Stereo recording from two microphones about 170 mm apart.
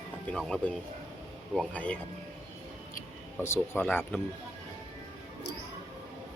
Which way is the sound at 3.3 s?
15° left (ahead or behind).